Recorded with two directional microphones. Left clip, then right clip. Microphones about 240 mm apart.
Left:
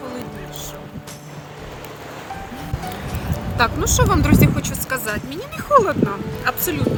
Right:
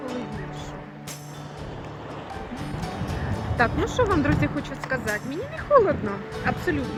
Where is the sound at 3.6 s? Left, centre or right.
Centre.